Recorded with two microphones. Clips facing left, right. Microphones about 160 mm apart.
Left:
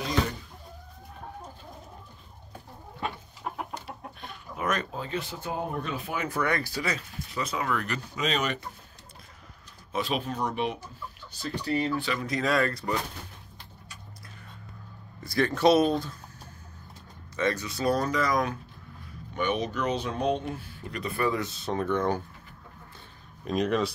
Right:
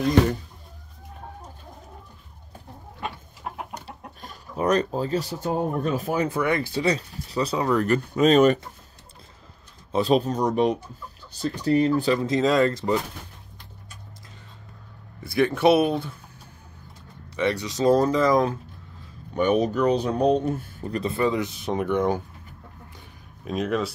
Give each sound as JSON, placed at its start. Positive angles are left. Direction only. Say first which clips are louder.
{"t": 3.8, "sound": "speech", "louder": "even", "side_deg": -35}
{"t": 6.2, "sound": "speech", "louder": "right 5 dB", "side_deg": -20}
{"t": 9.9, "sound": "speech", "louder": "right 9 dB", "side_deg": -35}
{"t": 12.2, "sound": "speech", "louder": "right 6 dB", "side_deg": -25}
{"t": 15.3, "sound": "speech", "louder": "right 3 dB", "side_deg": -10}
{"t": 17.4, "sound": "speech", "louder": "right 4 dB", "side_deg": -15}
{"t": 19.3, "sound": "speech", "louder": "right 8 dB", "side_deg": -40}
{"t": 23.4, "sound": "speech", "louder": "right 1 dB", "side_deg": 0}